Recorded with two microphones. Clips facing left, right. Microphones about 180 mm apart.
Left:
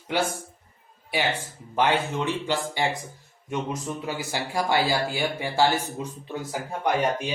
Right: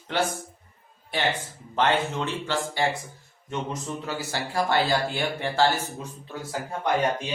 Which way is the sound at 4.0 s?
15° left (ahead or behind).